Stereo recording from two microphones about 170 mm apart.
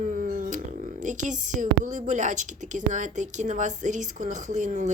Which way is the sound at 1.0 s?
45° right (ahead or behind).